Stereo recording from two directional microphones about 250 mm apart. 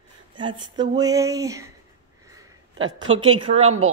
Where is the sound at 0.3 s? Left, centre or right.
Centre.